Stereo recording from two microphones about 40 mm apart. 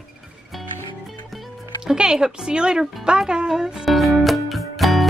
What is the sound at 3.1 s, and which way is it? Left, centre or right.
Music, right.